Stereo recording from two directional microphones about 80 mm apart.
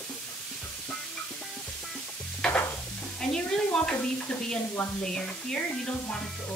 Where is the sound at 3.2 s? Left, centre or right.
Centre.